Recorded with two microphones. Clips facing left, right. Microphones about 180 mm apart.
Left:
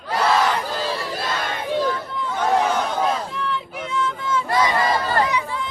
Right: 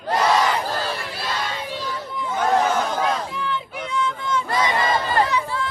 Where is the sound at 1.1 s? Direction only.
50° left (ahead or behind).